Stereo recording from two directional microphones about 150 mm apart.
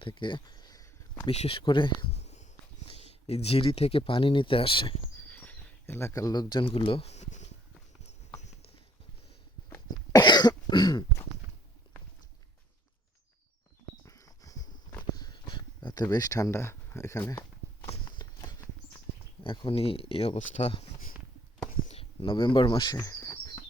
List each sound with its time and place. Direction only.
0.0 s a sound: 35° left (ahead or behind)
1.3 s speech: 40° left (ahead or behind)
5.2 s speech: 10° left (ahead or behind); by 7.5 s 50° left (ahead or behind)
9.6 s cough: 20° left (ahead or behind)
14.0 s a sound: 20° left (ahead or behind)
17.8 s walk: 40° left (ahead or behind)
19.4 s speech: 35° left (ahead or behind)
21.8 s bird: 40° left (ahead or behind); by 23.6 s 20° left (ahead or behind)